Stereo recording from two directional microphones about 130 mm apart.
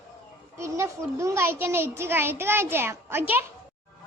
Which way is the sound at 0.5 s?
20° right (ahead or behind).